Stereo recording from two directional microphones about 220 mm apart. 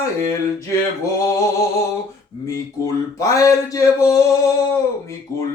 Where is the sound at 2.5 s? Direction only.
15° left (ahead or behind).